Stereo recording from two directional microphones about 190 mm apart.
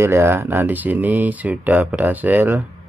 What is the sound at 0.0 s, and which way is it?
Speech, 15° right (ahead or behind).